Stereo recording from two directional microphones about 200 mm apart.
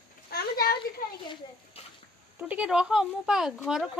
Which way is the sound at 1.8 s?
30° left (ahead or behind).